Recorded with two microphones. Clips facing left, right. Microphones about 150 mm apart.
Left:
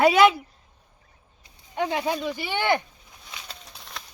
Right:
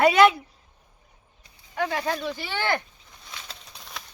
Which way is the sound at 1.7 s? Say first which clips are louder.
Left 1 dB; 20° left (ahead or behind).